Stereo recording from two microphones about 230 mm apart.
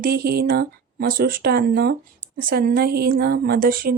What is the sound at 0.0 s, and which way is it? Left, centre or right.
A woman's voice, right.